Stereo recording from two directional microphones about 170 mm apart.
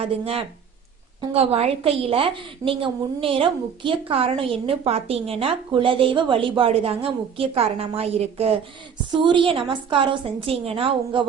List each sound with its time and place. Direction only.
0.0 s a woman's voice: 35° right (ahead or behind)